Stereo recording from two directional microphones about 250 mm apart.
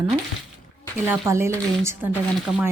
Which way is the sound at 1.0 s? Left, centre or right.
Centre.